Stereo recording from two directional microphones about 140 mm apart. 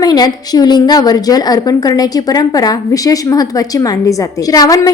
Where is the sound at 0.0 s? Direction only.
30° left (ahead or behind).